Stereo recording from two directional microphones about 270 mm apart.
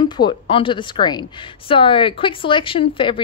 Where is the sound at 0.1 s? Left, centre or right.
Centre.